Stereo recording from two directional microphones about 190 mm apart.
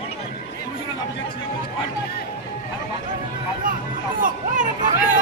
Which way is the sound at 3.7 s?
45° right (ahead or behind).